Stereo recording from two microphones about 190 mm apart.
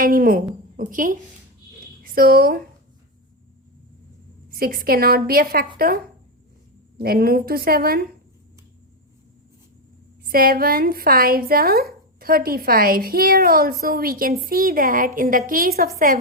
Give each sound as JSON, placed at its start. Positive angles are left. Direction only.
{"t": 0.0, "sound": "speech", "side_deg": -50}
{"t": 4.5, "sound": "speech", "side_deg": -50}
{"t": 10.2, "sound": "speech", "side_deg": -50}